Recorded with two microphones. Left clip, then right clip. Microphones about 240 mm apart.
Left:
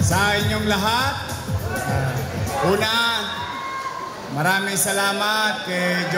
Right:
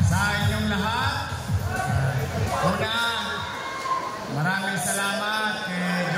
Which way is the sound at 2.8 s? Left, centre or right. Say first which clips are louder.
Left 5 dB; left.